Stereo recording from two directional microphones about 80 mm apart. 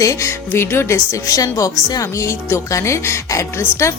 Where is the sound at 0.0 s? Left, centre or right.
Left.